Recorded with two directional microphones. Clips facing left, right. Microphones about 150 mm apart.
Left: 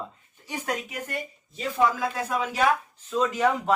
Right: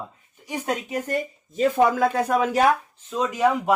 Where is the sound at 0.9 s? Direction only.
45° right (ahead or behind).